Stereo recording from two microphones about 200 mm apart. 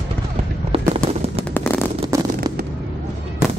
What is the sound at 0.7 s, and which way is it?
Fireworks, 25° right (ahead or behind).